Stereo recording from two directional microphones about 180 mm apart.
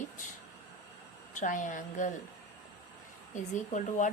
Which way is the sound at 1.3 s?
45° left (ahead or behind).